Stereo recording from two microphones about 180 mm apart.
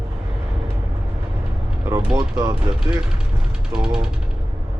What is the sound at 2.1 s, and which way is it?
Speech, 20° right (ahead or behind).